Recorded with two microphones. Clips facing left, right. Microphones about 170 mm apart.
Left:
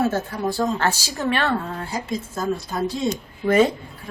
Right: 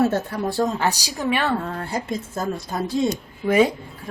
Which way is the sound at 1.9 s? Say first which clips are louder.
Right 2 dB; 55° right (ahead or behind).